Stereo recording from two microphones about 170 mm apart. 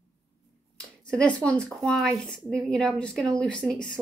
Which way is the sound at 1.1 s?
5° left (ahead or behind).